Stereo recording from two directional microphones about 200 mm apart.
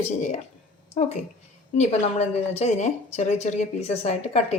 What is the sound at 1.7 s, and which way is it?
A woman's voice, 35° left (ahead or behind).